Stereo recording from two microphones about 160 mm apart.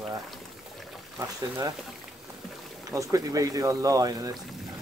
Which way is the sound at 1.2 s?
20° right (ahead or behind).